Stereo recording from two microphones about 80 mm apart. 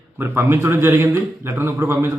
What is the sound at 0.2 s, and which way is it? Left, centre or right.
A man's voice, right.